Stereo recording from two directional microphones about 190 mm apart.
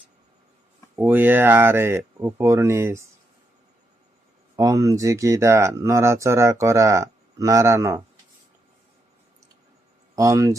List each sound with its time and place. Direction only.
0.9 s speech: 10° right (ahead or behind)
4.5 s speech: 20° right (ahead or behind)
10.2 s speech: 15° right (ahead or behind)